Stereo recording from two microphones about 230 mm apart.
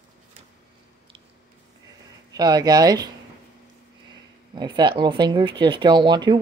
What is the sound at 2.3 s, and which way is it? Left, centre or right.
Speech, centre.